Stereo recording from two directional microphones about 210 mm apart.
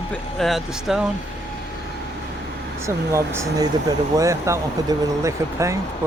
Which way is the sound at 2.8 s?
15° right (ahead or behind).